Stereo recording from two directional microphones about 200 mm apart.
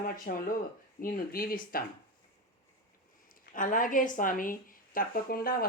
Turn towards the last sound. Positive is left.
turn(degrees=45)  # may be behind; listen again after turning